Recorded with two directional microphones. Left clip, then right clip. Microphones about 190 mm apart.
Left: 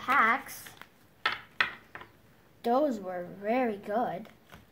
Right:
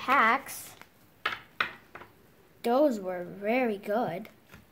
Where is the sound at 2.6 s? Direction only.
55° right (ahead or behind).